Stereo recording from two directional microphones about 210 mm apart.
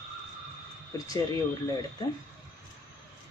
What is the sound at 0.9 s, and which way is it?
Speech, 15° left (ahead or behind).